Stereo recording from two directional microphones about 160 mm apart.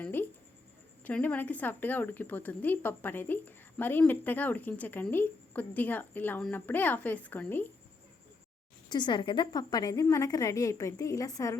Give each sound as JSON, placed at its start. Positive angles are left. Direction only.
{"t": 0.0, "sound": "a sound", "side_deg": 15}
{"t": 1.0, "sound": "a woman's voice", "side_deg": 10}
{"t": 8.9, "sound": "a woman's voice", "side_deg": 30}